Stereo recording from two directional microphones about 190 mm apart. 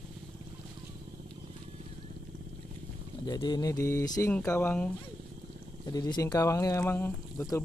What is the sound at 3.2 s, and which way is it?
Speech, 20° left (ahead or behind).